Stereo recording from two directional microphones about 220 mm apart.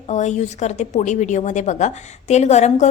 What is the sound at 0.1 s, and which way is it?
A woman's voice, 30° left (ahead or behind).